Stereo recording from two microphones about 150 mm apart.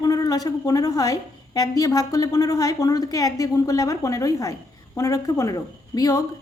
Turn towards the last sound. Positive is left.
turn(degrees=25)  # may be behind; listen again after turning